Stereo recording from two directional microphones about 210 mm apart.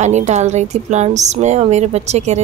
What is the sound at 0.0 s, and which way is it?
Speech, 35° right (ahead or behind).